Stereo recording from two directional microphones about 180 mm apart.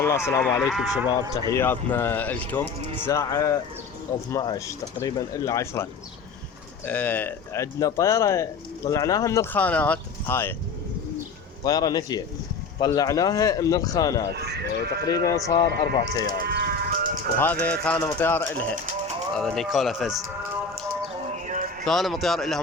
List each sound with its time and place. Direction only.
0.0 s speech: 15° left (ahead or behind)
0.7 s speech: centre (ahead or behind)
1.3 s speech: 20° left (ahead or behind)
11.6 s speech: 20° left (ahead or behind)
14.3 s speech: 65° right (ahead or behind)
15.0 s speech: 20° left (ahead or behind)
16.5 s livestock: 65° right (ahead or behind)
17.3 s speech: 10° left (ahead or behind)
21.8 s speech: centre (ahead or behind)